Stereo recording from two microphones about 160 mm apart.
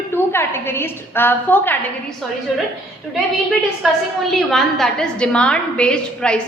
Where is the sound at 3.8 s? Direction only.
Centre (ahead or behind).